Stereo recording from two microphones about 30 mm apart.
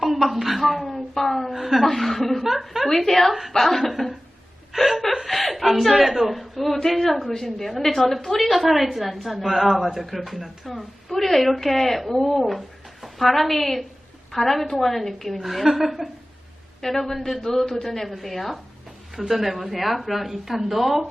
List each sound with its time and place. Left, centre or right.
0.0 s a sound: centre
0.3 s a woman's voice: centre
1.5 s speech: centre
1.8 s a woman's voice: centre
2.5 s a woman's voice: centre
2.8 s a woman's voice: centre
4.7 s speech: centre
5.2 s a woman's voice: centre
9.4 s a woman's voice: centre
11.2 s a woman's voice: centre
16.8 s a woman's voice: centre
17.2 s a woman's voice: centre
17.7 s a woman's voice: centre